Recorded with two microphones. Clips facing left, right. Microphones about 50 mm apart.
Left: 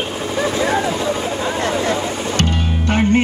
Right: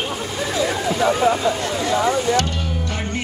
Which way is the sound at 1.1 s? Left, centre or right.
Right.